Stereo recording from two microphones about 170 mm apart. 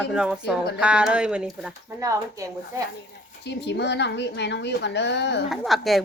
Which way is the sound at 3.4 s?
85° left.